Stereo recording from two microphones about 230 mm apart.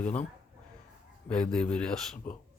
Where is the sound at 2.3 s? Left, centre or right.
Left.